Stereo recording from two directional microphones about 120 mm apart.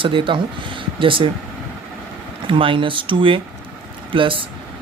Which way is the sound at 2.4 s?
45° right (ahead or behind).